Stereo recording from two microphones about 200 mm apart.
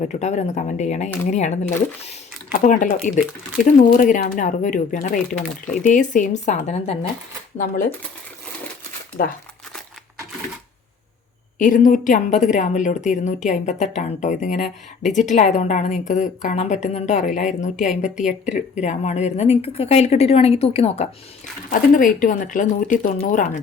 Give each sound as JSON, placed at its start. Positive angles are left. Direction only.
{"t": 0.0, "sound": "a woman's voice", "side_deg": 35}
{"t": 11.6, "sound": "a woman's voice", "side_deg": 40}
{"t": 21.7, "sound": "a woman's voice", "side_deg": 40}